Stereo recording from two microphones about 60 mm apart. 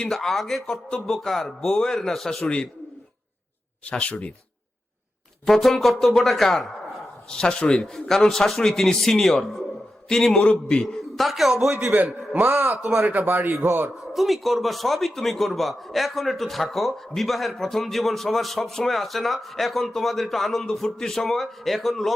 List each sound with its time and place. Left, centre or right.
0.1 s a man's voice: centre
3.8 s speech: left
5.5 s a man's voice: centre
7.3 s a man's voice: centre
10.3 s a man's voice: centre
11.2 s a man's voice: centre
12.4 s speech: right
14.1 s a man's voice: centre